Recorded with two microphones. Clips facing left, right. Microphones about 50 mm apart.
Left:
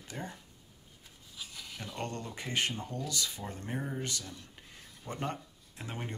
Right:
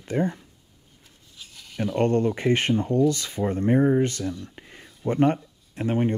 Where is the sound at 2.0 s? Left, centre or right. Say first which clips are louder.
Right 18 dB; right.